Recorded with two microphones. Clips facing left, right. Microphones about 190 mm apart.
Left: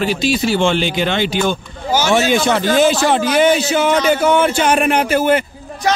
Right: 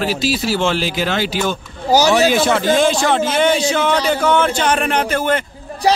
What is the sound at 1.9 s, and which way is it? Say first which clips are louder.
Speech: right 3 dB; 40° right (ahead or behind).